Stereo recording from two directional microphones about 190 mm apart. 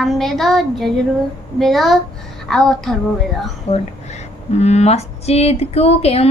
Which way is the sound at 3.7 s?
35° left (ahead or behind).